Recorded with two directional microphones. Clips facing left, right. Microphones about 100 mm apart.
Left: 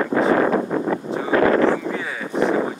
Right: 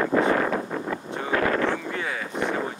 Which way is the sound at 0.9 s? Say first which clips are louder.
Left 5 dB; 35° left (ahead or behind).